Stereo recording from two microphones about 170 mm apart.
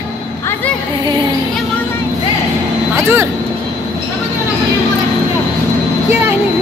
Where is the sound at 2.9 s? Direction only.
15° right (ahead or behind).